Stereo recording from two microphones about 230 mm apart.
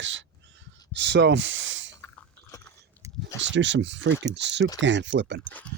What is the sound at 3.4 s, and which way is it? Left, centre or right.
Speech, right.